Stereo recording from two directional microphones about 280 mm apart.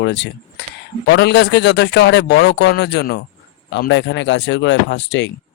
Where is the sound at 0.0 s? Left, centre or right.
Left.